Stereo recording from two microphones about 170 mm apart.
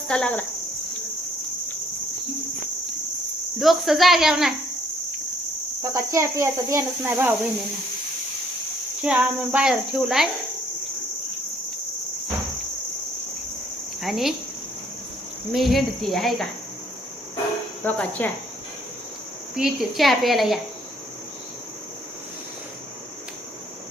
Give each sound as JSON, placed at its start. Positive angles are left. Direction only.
{"t": 0.1, "sound": "cricket", "side_deg": 5}
{"t": 3.6, "sound": "speech", "side_deg": 0}
{"t": 5.8, "sound": "speech", "side_deg": -20}
{"t": 9.0, "sound": "speech", "side_deg": -5}
{"t": 14.0, "sound": "speech", "side_deg": 0}
{"t": 15.5, "sound": "speech", "side_deg": 0}
{"t": 17.8, "sound": "cricket", "side_deg": 10}
{"t": 19.5, "sound": "speech", "side_deg": 0}